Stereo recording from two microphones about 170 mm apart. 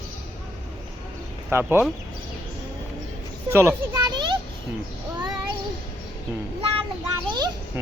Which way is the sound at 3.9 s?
25° right (ahead or behind).